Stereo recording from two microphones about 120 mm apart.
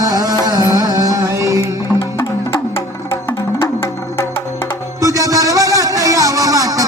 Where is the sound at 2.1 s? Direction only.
20° left (ahead or behind).